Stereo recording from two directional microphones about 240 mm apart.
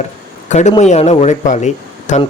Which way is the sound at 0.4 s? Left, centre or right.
Left.